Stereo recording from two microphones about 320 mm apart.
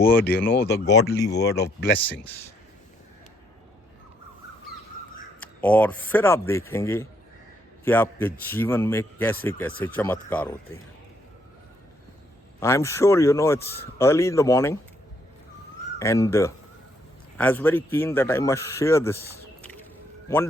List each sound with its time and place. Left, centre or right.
0.0 s speech: centre
0.5 s speech: left
1.9 s a man's voice: centre
5.5 s a man's voice: centre
12.5 s a man's voice: centre
16.0 s a man's voice: centre
20.2 s a man's voice: centre